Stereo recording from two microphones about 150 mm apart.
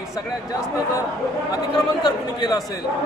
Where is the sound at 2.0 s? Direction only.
25° left (ahead or behind).